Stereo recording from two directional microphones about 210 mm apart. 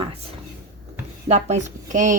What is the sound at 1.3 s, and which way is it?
Speech, 35° right (ahead or behind).